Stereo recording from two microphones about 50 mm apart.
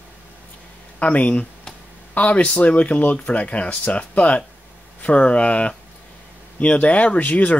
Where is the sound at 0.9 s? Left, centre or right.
Left.